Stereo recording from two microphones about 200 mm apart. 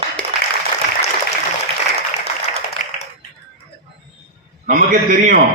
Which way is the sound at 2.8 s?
40° left (ahead or behind).